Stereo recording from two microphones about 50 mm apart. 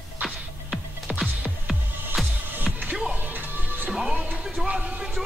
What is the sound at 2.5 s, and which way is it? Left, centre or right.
Music, right.